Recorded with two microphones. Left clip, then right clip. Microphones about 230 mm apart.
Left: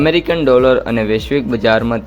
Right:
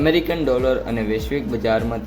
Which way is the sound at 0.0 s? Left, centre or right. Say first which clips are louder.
Left 5 dB; left.